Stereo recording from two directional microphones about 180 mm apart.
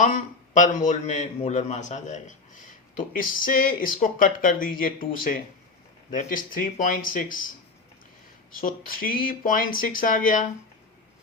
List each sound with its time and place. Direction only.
0.0 s a man's voice: 45° left (ahead or behind)
8.5 s a man's voice: 50° left (ahead or behind)